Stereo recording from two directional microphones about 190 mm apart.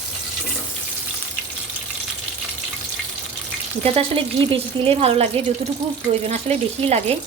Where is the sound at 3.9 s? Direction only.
30° right (ahead or behind).